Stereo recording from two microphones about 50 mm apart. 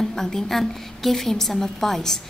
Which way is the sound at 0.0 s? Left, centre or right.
Centre.